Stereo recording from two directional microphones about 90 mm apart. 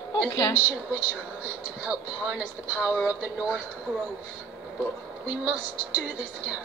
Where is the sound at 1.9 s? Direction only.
15° right (ahead or behind).